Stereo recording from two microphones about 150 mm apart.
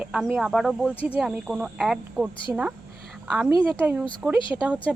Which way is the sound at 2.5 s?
20° right (ahead or behind).